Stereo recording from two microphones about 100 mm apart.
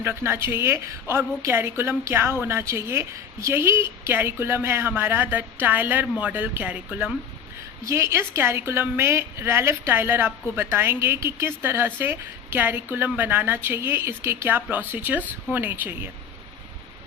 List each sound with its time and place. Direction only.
0.0 s a woman's voice: 25° right (ahead or behind)
7.9 s a woman's voice: 25° right (ahead or behind)